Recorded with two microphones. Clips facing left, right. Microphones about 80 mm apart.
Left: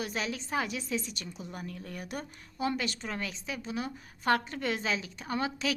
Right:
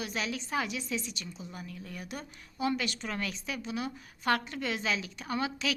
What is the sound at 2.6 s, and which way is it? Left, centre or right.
A woman's voice, left.